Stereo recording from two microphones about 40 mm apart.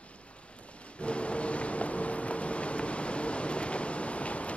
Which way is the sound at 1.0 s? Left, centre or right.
Left.